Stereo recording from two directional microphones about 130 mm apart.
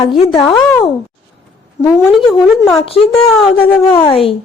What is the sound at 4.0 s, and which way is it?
Speech, 45° left (ahead or behind).